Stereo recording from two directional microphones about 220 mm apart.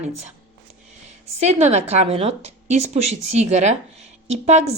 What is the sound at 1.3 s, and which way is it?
A woman's voice, 30° right (ahead or behind).